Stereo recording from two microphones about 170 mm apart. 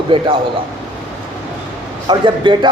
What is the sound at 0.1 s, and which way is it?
Speech, 30° right (ahead or behind).